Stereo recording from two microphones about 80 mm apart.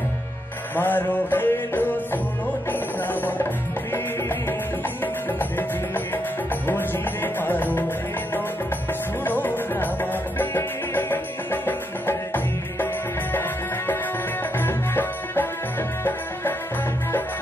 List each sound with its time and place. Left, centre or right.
0.7 s music: left
5.0 s music: left
7.3 s music: left
9.2 s music: left
14.6 s music: left